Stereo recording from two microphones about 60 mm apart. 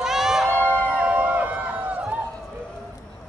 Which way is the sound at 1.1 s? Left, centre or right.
Right.